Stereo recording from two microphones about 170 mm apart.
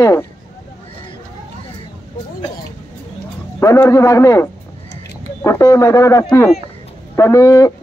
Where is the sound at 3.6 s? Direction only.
20° left (ahead or behind).